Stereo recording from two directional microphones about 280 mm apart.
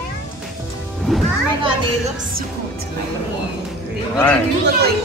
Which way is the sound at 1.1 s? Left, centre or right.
Centre.